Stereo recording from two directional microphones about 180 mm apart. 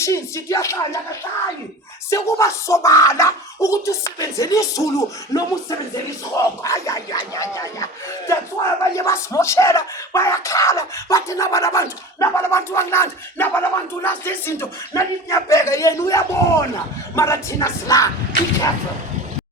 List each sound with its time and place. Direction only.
0.0 s speech: 15° left (ahead or behind)
2.0 s speech: 15° left (ahead or behind)